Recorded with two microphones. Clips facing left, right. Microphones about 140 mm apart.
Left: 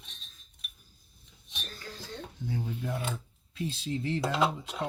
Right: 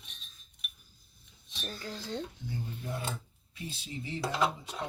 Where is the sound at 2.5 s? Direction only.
85° left.